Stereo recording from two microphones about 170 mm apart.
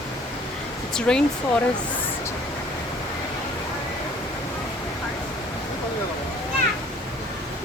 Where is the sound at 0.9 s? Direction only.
5° left (ahead or behind).